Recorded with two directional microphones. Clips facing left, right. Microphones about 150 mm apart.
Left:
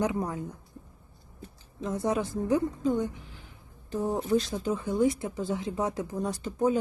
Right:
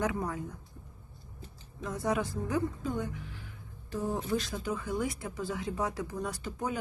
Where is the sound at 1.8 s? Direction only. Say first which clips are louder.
Left 3 dB; 25° left (ahead or behind).